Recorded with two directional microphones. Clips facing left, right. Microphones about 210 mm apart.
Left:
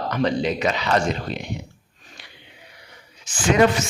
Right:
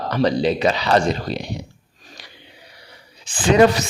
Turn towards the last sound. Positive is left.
turn(degrees=-35)  # may be behind; listen again after turning